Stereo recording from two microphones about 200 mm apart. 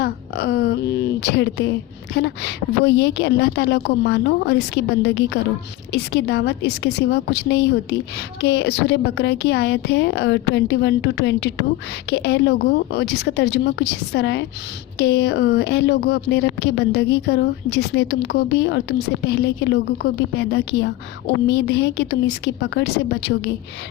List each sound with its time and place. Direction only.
0.0 s speech: 50° left (ahead or behind)